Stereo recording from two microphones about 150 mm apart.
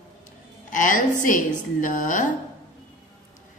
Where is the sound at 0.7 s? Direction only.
65° left (ahead or behind).